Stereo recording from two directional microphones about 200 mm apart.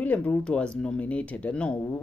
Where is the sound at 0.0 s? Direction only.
5° left (ahead or behind).